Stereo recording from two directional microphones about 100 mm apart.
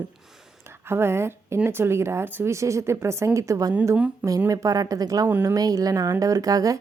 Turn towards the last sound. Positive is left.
turn(degrees=-35)  # may be behind; listen again after turning